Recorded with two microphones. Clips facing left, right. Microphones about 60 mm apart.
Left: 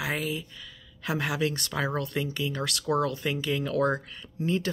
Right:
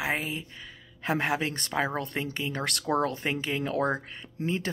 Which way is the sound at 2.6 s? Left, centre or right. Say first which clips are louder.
Even; right.